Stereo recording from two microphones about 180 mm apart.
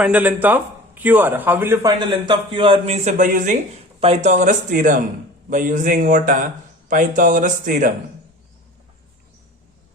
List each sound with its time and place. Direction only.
0.0 s a man's voice: 10° right (ahead or behind); by 7.9 s 45° right (ahead or behind)